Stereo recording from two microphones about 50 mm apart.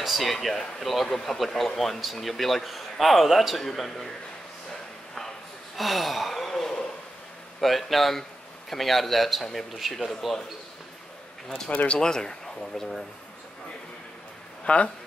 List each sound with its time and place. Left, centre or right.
0.0 s speech: centre
5.8 s gasp: centre
7.6 s speech: centre
11.4 s speech: centre
11.7 s speech: left
12.0 s speech: centre
14.6 s speech: left